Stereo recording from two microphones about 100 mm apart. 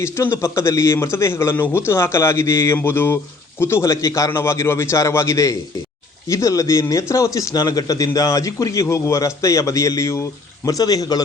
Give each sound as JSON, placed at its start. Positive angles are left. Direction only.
{"t": 0.0, "sound": "a man's voice", "side_deg": 30}
{"t": 10.7, "sound": "a man's voice", "side_deg": 40}